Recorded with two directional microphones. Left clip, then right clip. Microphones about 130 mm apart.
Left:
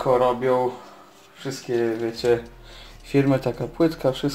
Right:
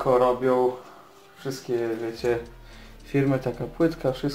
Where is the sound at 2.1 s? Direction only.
45° left (ahead or behind).